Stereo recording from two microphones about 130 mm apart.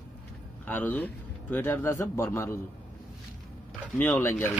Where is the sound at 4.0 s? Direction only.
15° left (ahead or behind).